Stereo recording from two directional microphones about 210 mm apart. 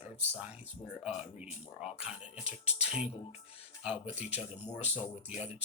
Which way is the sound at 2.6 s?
30° left (ahead or behind).